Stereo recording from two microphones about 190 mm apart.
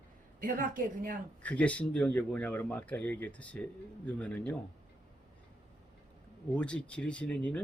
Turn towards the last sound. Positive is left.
turn(degrees=5)  # may be behind; listen again after turning